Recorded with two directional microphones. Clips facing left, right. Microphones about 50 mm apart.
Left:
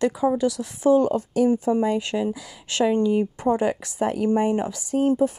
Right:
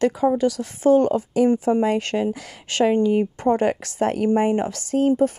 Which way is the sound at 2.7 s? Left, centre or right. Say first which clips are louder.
Right 2 dB; right.